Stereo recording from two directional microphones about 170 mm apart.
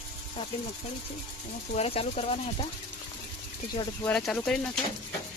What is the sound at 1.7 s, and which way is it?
Speech, 35° left (ahead or behind).